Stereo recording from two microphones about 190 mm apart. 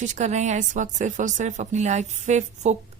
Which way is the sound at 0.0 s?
40° right (ahead or behind).